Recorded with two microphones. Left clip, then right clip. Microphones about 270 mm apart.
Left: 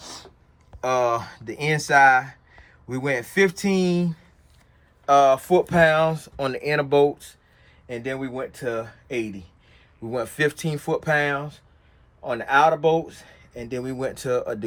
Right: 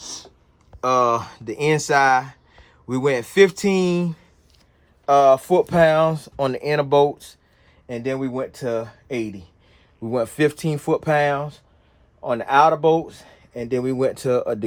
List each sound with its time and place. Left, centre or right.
0.8 s speech: right
1.9 s a sound: right
2.9 s speech: right